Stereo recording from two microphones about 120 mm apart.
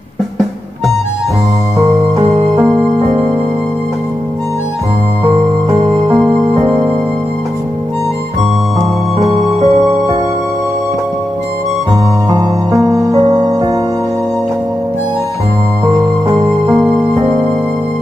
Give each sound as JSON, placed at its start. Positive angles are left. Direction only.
{"t": 2.2, "sound": "music", "side_deg": -50}
{"t": 5.8, "sound": "music", "side_deg": -45}
{"t": 9.4, "sound": "music", "side_deg": -65}
{"t": 12.3, "sound": "music", "side_deg": -35}
{"t": 17.1, "sound": "music", "side_deg": -50}